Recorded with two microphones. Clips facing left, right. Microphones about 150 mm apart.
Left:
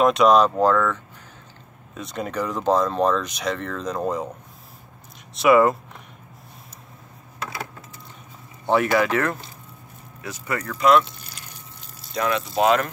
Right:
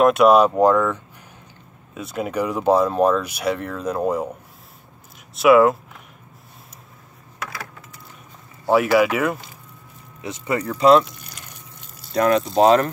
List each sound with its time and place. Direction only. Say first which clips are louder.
0.0 s speech: right 3 dB; 5° right (ahead or behind)
5.3 s speech: right 3 dB; centre (ahead or behind)
7.3 s a sound: left 1 dB; 25° left (ahead or behind)
8.6 s speech: right 3 dB; 5° right (ahead or behind)
10.2 s speech: right 5 dB; 25° right (ahead or behind)
11.1 s a sound: right 1 dB; 30° left (ahead or behind)
12.1 s speech: right 6 dB; 45° right (ahead or behind)